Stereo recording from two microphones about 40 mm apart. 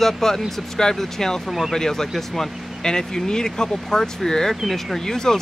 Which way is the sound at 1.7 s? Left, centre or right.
Centre.